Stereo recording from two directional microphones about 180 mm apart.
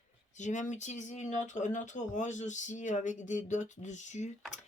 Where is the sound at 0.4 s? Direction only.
45° left (ahead or behind).